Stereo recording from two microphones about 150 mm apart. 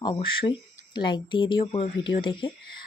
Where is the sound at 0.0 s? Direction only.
35° left (ahead or behind).